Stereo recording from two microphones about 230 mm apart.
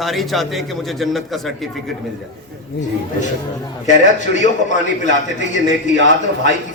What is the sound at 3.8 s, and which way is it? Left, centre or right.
A man's voice, left.